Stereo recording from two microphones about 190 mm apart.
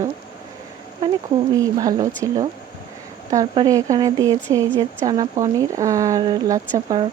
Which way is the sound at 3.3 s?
20° right (ahead or behind).